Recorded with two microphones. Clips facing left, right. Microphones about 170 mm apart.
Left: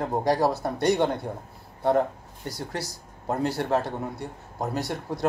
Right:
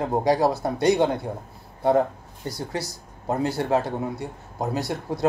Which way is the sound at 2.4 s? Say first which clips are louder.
Right 3 dB; 10° right (ahead or behind).